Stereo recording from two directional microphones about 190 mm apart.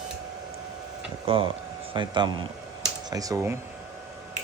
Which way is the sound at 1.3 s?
30° right (ahead or behind).